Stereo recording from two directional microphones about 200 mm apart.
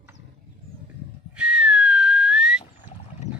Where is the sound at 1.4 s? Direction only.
5° right (ahead or behind).